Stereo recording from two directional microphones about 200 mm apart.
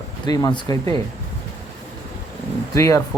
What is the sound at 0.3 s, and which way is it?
Speech, 20° left (ahead or behind).